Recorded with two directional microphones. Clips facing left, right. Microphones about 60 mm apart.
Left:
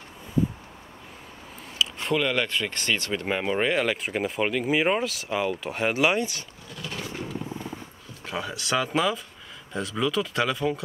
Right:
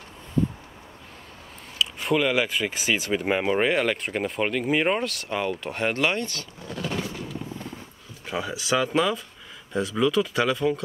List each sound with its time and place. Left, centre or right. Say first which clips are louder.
1.8 s speech: right 2 dB; centre
6.7 s vehicle: right 7 dB; right
7.1 s wild animals: left 1 dB; left
8.3 s speech: right 2 dB; centre